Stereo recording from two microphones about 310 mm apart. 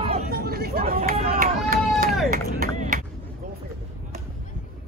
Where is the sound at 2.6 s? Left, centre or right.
Right.